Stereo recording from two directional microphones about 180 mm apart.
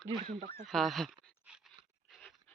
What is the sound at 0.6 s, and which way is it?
Speech, centre (ahead or behind).